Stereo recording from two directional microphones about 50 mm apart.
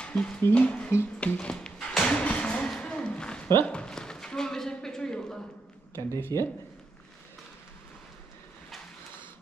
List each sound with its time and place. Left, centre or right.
0.1 s speech: left
1.2 s music: left
2.8 s a sound: centre
3.6 s speech: centre
5.9 s speech: left